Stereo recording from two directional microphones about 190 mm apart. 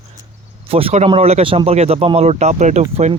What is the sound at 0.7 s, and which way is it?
Speech, 30° right (ahead or behind).